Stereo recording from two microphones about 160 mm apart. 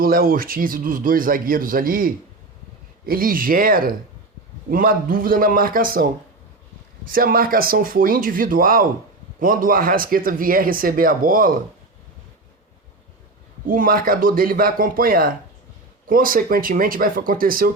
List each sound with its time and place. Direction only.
0.0 s speech: 65° right (ahead or behind)
7.1 s speech: 65° right (ahead or behind)
13.7 s speech: 60° right (ahead or behind)